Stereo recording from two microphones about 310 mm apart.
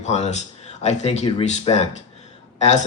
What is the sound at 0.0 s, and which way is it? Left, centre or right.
Speech, left.